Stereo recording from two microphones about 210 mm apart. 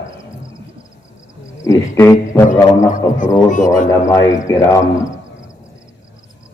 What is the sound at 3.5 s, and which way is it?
Speech, 40° left (ahead or behind).